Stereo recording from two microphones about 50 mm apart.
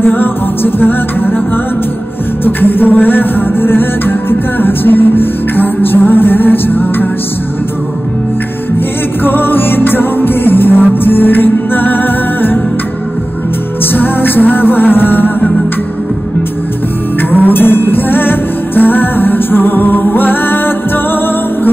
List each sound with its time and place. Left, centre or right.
0.0 s music: left
2.4 s music: left
9.2 s music: left
13.9 s music: left
17.3 s music: left